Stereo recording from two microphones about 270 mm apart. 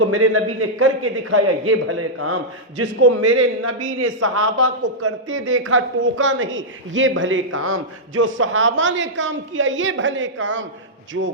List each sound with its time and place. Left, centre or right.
0.0 s a man's voice: right
4.5 s speech: right